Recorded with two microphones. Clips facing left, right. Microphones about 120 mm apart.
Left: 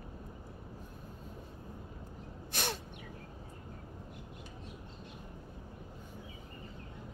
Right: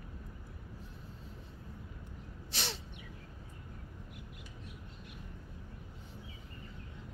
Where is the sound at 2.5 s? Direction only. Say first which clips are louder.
Left 4 dB; 50° left (ahead or behind).